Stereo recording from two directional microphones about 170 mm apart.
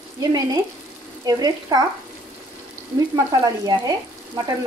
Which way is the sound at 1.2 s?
25° right (ahead or behind).